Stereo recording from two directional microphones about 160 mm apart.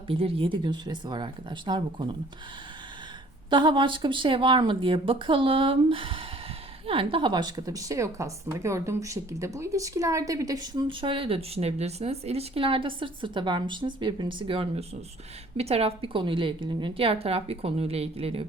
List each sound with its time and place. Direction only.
0.1 s speech: 35° right (ahead or behind)
3.5 s a woman's voice: 30° right (ahead or behind)